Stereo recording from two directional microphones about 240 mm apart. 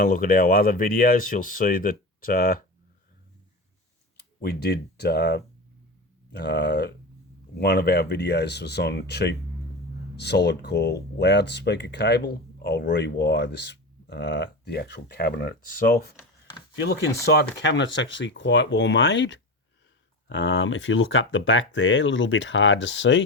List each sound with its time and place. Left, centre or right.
0.0 s speech: left
4.4 s speech: left